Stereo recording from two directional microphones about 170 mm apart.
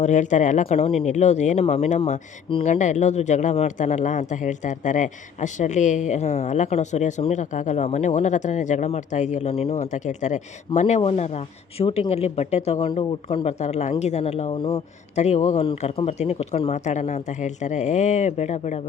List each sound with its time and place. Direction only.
0.0 s speech: 45° left (ahead or behind)